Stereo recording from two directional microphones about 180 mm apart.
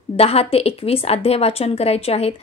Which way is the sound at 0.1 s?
35° left (ahead or behind).